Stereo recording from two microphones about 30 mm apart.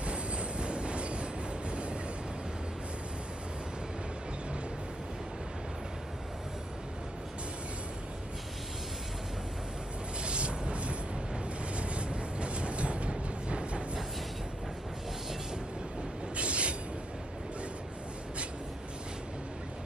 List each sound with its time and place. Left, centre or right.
0.0 s train: right
10.2 s a sound: right
11.7 s vehicle: right
16.3 s train: right